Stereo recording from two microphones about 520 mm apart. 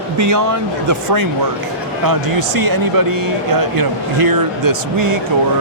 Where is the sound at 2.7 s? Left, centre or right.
Right.